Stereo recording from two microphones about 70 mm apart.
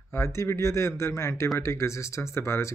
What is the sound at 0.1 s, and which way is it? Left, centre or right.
Speech, left.